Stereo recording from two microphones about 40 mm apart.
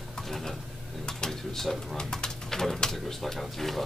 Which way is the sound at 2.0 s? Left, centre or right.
Centre.